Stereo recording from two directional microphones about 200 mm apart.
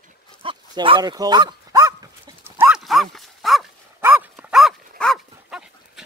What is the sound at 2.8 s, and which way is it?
Dog, centre (ahead or behind).